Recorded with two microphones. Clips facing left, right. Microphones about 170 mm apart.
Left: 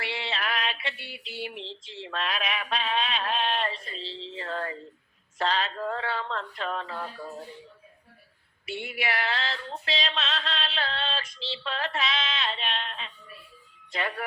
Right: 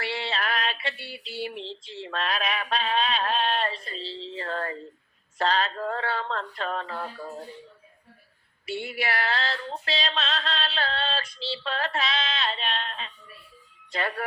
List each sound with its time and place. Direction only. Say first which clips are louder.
0.0 s female singing: right 2 dB; 35° right (ahead or behind)
8.6 s female singing: right 2 dB; 35° right (ahead or behind)